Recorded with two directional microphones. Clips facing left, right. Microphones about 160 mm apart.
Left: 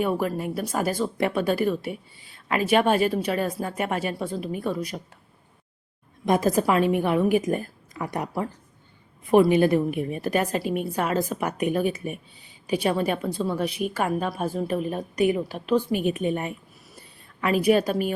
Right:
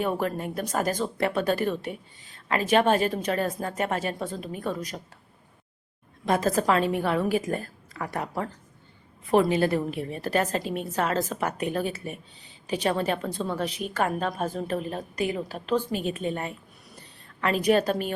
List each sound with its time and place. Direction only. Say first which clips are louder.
0.0 s a woman's voice: left 2 dB; 10° left (ahead or behind)
6.2 s a woman's voice: left 2 dB; 15° left (ahead or behind)
17.0 s a sound: left 1 dB; 10° left (ahead or behind)